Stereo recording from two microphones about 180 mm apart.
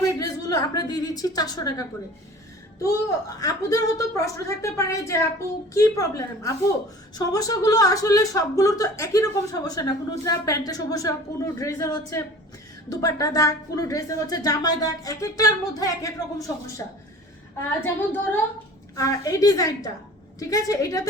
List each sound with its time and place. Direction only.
0.2 s a woman's voice: 20° left (ahead or behind)
2.8 s a woman's voice: 20° left (ahead or behind)